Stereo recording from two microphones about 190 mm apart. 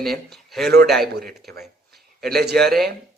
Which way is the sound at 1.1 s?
55° right (ahead or behind).